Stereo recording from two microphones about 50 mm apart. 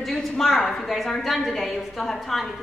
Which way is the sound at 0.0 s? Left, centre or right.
Centre.